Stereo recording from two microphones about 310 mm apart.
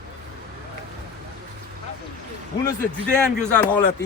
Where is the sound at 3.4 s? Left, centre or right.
Centre.